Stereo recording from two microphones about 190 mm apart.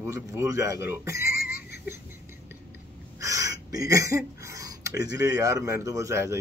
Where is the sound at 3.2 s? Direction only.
15° right (ahead or behind).